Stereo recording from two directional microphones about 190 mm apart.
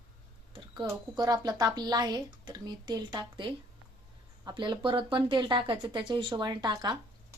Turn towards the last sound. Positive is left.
turn(degrees=-25)  # may be behind; listen again after turning